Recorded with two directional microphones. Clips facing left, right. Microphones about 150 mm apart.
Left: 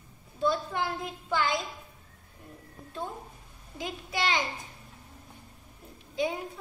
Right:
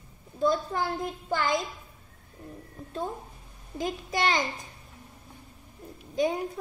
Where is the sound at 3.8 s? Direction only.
45° right (ahead or behind).